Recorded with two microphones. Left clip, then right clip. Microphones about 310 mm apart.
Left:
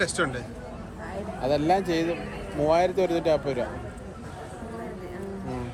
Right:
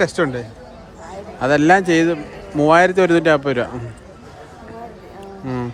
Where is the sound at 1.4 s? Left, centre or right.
Right.